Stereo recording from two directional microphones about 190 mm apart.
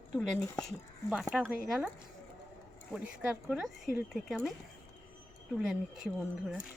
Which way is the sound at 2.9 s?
5° right (ahead or behind).